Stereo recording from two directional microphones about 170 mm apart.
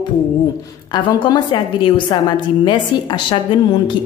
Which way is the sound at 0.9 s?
25° left (ahead or behind).